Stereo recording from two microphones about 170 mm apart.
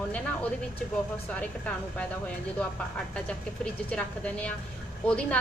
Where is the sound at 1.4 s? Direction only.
5° left (ahead or behind).